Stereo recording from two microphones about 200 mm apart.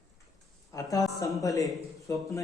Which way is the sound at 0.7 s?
15° left (ahead or behind).